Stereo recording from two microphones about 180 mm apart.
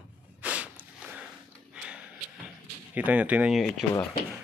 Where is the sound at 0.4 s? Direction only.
5° right (ahead or behind).